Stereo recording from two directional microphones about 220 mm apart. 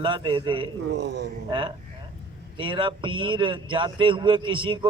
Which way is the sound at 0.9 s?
50° right (ahead or behind).